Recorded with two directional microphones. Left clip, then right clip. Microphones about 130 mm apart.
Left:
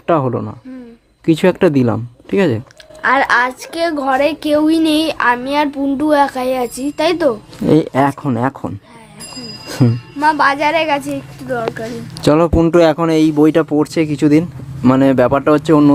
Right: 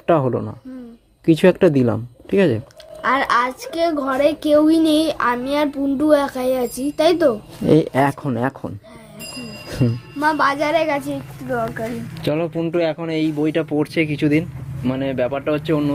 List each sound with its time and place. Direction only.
0.1 s a woman's voice: 10° left (ahead or behind)
9.8 s speech: 25° left (ahead or behind)
10.2 s a woman's voice: 5° left (ahead or behind)
11.5 s speech: 20° left (ahead or behind)
12.1 s speech: 55° left (ahead or behind)
13.7 s speech: 30° left (ahead or behind)
14.8 s speech: 60° left (ahead or behind)